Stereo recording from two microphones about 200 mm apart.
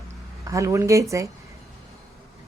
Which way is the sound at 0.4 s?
15° right (ahead or behind).